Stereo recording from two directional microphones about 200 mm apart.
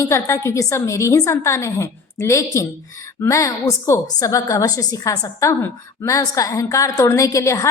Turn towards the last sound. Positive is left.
turn(degrees=15)  # may be behind; listen again after turning